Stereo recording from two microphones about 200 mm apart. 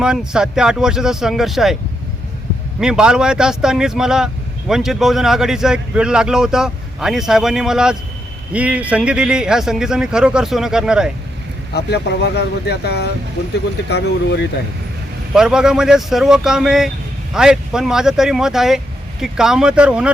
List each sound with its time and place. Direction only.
0.0 s speech: 5° right (ahead or behind)
2.8 s speech: 5° right (ahead or behind)
11.7 s speech: 55° left (ahead or behind)
15.3 s speech: 5° right (ahead or behind)